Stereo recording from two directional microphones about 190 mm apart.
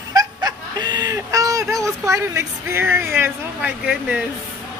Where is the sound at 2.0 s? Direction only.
15° right (ahead or behind).